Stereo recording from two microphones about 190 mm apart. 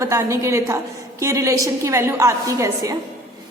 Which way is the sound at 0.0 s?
15° right (ahead or behind).